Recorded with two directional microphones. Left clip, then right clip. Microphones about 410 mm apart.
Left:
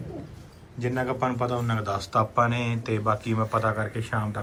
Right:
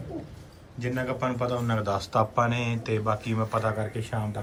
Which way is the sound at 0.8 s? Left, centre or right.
Centre.